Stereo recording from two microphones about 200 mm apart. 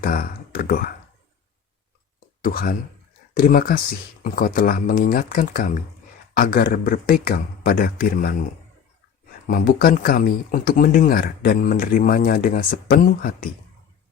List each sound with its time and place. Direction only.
0.0 s speech: 45° left (ahead or behind)
2.4 s speech: 45° left (ahead or behind)
9.6 s speech: 50° left (ahead or behind)